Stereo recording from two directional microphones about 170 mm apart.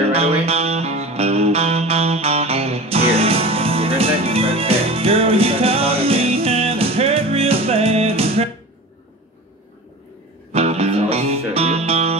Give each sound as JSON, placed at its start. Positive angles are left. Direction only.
{"t": 0.1, "sound": "music", "side_deg": -35}
{"t": 10.5, "sound": "music", "side_deg": -40}